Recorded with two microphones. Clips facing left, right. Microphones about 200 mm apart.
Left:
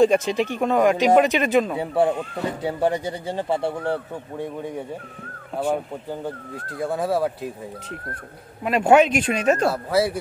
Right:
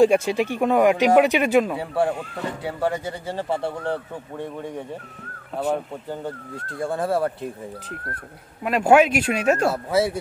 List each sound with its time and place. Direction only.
0.0 s speech: 10° right (ahead or behind)
1.8 s speech: 20° left (ahead or behind)
6.8 s speech: 5° left (ahead or behind)
8.6 s speech: 5° right (ahead or behind)